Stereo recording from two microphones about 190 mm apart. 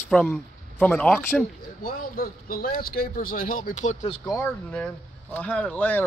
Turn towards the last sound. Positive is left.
turn(degrees=10)  # may be behind; listen again after turning